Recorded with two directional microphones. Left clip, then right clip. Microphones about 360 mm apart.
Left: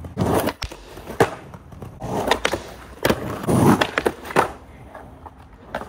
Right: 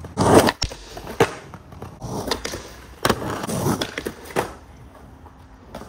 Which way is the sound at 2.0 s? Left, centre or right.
Left.